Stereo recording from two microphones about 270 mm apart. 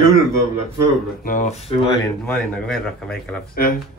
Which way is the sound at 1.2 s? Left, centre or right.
Left.